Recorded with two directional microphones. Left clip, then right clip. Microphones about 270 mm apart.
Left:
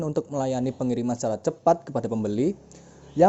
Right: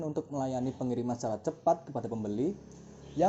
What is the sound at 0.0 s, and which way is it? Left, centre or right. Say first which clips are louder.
Speech: left 8 dB; left.